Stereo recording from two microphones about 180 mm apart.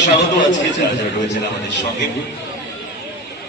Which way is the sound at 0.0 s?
85° left.